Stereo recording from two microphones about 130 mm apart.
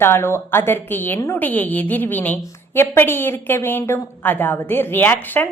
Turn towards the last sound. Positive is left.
turn(degrees=15)  # may be behind; listen again after turning